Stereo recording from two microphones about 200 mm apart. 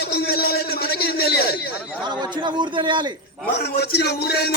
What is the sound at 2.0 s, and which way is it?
A man's voice, 20° right (ahead or behind).